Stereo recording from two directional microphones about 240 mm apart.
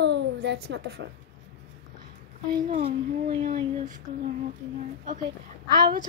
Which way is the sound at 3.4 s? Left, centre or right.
Right.